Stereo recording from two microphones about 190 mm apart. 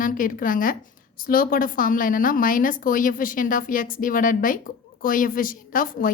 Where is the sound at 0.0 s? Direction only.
45° left (ahead or behind).